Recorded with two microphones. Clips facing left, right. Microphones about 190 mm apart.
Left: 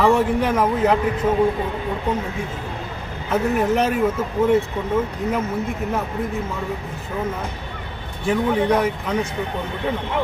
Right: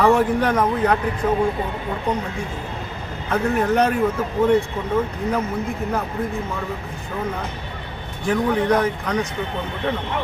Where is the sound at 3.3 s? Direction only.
5° left (ahead or behind).